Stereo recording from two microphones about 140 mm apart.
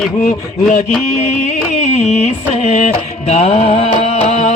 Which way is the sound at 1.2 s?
55° left (ahead or behind).